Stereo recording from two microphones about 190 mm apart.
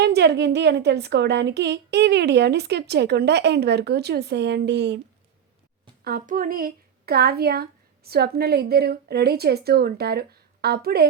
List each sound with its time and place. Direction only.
0.0 s a woman's voice: 60° right (ahead or behind)
6.1 s a woman's voice: 50° right (ahead or behind)